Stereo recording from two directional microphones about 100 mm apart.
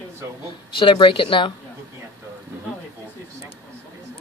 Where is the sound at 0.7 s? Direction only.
55° left (ahead or behind).